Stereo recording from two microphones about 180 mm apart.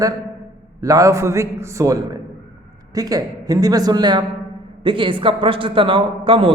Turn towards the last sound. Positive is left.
turn(degrees=-30)  # may be behind; listen again after turning